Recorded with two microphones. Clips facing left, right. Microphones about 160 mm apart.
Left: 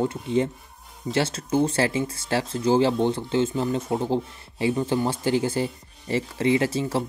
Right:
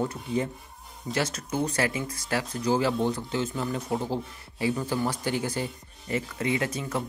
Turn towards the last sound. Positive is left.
turn(degrees=30)  # may be behind; listen again after turning